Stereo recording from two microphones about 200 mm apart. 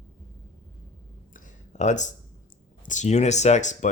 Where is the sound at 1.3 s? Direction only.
40° left (ahead or behind).